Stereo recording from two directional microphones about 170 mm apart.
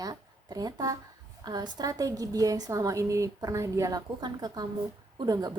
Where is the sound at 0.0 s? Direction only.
20° right (ahead or behind).